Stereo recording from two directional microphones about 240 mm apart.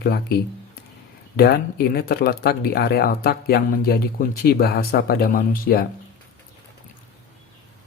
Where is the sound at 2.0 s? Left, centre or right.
Left.